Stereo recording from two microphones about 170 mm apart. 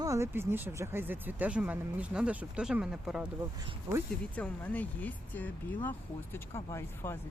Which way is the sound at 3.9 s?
20° right (ahead or behind).